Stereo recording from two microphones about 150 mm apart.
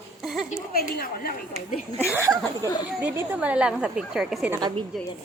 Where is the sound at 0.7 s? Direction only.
85° left.